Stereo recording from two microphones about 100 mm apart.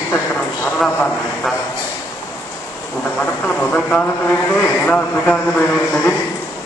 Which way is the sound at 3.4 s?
15° left (ahead or behind).